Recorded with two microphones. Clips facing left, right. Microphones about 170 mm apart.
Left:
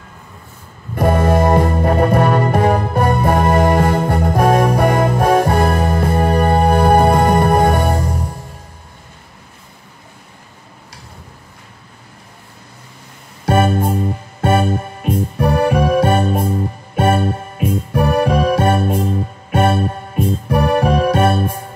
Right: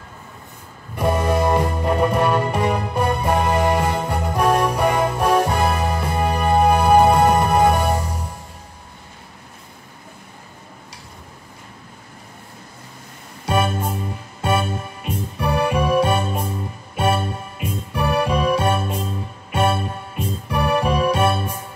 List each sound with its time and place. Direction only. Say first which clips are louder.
0.9 s music: left 5 dB; 50° left (ahead or behind)
13.5 s keyboard: left 6 dB; 50° left (ahead or behind)
14.4 s music: left 6 dB; 50° left (ahead or behind)